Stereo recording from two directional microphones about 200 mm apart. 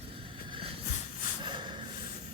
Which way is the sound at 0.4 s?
25° right (ahead or behind).